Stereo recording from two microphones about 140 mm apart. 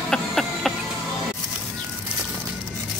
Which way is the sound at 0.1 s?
Centre (ahead or behind).